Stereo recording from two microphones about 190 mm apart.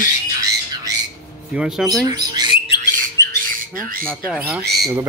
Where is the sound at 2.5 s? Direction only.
30° left (ahead or behind).